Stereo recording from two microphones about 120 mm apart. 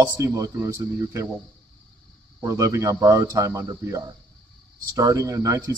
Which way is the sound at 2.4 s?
25° right (ahead or behind).